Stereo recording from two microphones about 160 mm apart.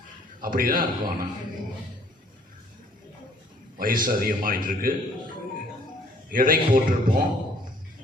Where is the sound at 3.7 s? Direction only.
60° right (ahead or behind).